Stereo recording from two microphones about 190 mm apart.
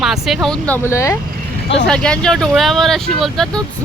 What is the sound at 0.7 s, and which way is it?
Speech, 15° left (ahead or behind).